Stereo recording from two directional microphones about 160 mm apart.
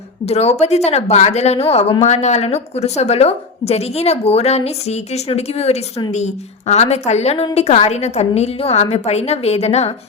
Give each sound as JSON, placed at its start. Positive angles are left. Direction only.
{"t": 0.3, "sound": "a woman's voice", "side_deg": 40}